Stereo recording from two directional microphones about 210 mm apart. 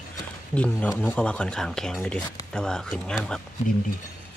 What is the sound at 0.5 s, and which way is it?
Speech, 5° left (ahead or behind).